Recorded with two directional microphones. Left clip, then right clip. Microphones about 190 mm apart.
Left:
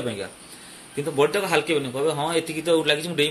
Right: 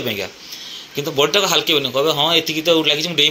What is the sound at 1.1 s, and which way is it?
A man's voice, 10° right (ahead or behind).